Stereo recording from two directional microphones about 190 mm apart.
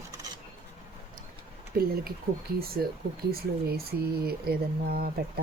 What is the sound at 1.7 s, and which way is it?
Speech, 50° right (ahead or behind).